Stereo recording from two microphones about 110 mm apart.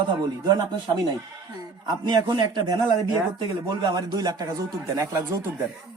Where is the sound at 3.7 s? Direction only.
40° right (ahead or behind).